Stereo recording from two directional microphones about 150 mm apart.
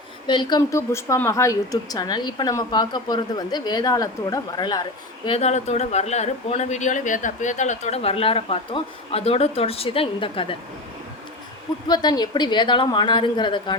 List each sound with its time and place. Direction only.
0.3 s a woman's voice: 30° left (ahead or behind)
5.4 s speech: 50° left (ahead or behind)
11.9 s a woman's voice: 25° left (ahead or behind)